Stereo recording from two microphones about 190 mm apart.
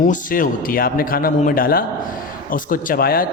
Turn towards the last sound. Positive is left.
turn(degrees=50)  # may be behind; listen again after turning